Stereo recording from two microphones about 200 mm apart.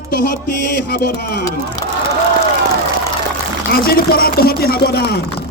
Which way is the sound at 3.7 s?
50° left (ahead or behind).